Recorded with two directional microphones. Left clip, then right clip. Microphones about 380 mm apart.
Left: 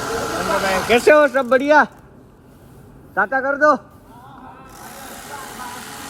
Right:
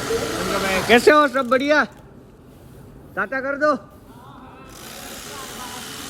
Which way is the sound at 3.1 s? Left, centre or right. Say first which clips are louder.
Left 5 dB; left.